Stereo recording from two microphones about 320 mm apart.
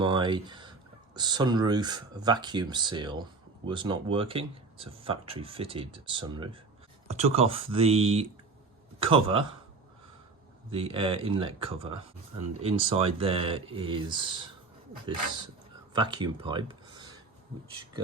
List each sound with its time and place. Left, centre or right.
0.0 s speech: centre
10.7 s speech: centre